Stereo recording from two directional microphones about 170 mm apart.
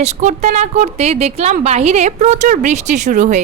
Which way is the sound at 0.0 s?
45° right (ahead or behind).